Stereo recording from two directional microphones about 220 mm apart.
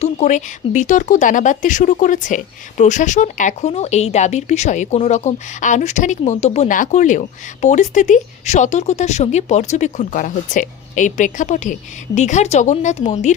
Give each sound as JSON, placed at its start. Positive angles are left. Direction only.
{"t": 0.0, "sound": "speech", "side_deg": 30}